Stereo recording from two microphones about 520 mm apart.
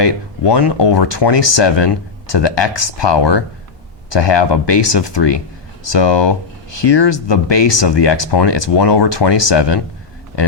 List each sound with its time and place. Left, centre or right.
0.0 s speech: left